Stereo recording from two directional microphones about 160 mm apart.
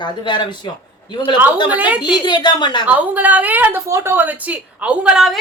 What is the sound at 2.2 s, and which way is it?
Speech, 30° left (ahead or behind).